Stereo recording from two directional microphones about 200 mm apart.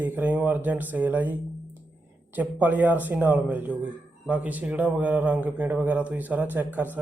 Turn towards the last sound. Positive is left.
turn(degrees=-10)  # may be behind; listen again after turning